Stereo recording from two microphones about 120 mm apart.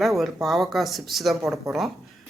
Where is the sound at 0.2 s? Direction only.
Centre (ahead or behind).